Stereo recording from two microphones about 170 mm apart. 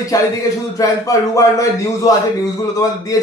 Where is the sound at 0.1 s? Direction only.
20° left (ahead or behind).